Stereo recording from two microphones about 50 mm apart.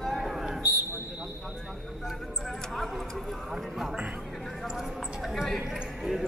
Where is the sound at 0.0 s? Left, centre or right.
Centre.